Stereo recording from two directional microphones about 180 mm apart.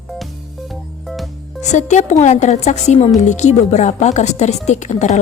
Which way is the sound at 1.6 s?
40° left (ahead or behind).